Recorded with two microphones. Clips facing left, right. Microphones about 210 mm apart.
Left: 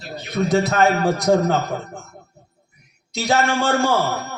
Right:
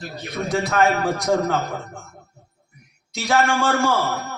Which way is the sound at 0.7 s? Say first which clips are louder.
Left 2 dB; 40° left (ahead or behind).